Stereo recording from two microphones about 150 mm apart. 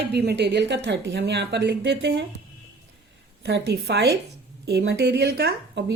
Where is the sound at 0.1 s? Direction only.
90° right.